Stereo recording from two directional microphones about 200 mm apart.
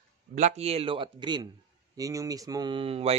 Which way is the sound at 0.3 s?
35° right (ahead or behind).